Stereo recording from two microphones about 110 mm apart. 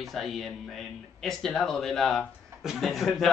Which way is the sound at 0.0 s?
Centre (ahead or behind).